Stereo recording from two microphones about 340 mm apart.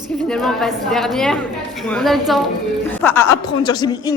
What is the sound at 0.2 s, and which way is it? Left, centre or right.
A woman's voice, centre.